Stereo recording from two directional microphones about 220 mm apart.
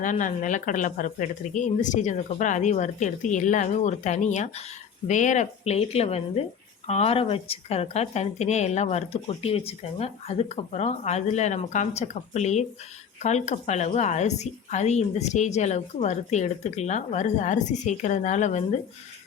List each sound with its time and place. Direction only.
0.0 s speech: 35° left (ahead or behind)